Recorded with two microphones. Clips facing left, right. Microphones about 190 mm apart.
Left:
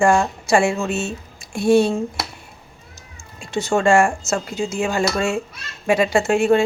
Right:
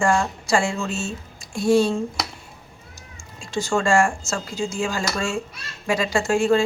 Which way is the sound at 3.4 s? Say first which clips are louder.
Left 2 dB; 65° left (ahead or behind).